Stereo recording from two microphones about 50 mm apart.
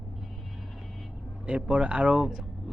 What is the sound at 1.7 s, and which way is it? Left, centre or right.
Speech, right.